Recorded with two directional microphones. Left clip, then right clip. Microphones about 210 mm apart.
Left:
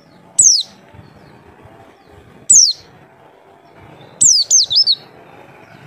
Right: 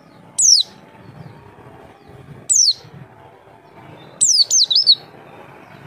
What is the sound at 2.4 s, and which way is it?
Bird, 5° right (ahead or behind).